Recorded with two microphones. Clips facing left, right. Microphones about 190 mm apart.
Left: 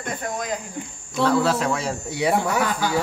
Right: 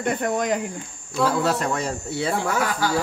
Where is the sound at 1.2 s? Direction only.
Centre (ahead or behind).